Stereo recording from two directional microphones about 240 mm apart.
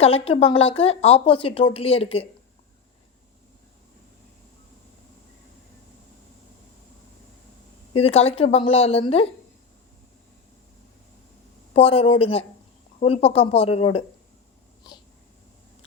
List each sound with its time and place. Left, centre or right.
0.0 s speech: left
7.9 s speech: left
11.7 s speech: left